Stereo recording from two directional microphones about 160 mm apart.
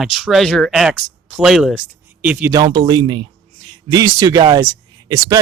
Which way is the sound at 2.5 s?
30° right (ahead or behind).